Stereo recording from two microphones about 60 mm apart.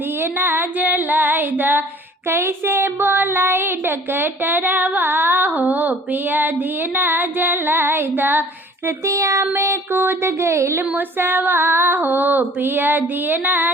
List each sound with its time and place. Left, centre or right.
0.2 s female singing: right
2.2 s speech: right
8.9 s child singing: right
9.6 s a sound: right
10.9 s speech: right